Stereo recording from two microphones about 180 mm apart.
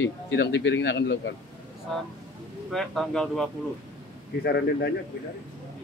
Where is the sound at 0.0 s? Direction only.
75° left (ahead or behind).